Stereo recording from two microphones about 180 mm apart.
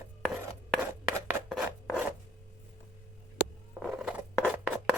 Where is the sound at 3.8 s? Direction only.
5° right (ahead or behind).